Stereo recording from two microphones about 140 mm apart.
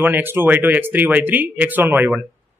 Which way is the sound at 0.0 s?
15° right (ahead or behind).